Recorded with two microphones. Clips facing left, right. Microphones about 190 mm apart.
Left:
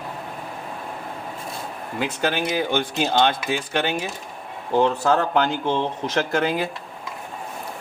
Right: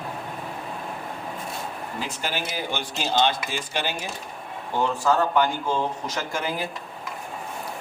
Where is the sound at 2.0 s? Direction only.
65° left (ahead or behind).